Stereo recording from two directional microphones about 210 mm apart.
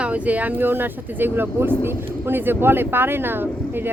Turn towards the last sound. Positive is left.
turn(degrees=-10)  # may be behind; listen again after turning